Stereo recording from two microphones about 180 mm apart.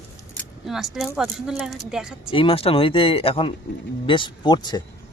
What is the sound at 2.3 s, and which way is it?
Speech, 30° left (ahead or behind).